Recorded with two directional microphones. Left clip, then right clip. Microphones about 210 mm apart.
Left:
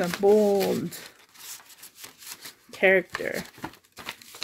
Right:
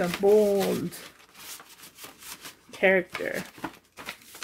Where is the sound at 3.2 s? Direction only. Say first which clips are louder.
Even; 45° left (ahead or behind).